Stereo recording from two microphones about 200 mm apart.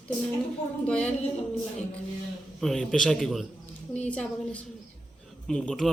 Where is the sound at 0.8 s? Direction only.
5° left (ahead or behind).